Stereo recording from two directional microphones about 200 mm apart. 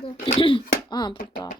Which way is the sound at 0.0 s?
30° left (ahead or behind).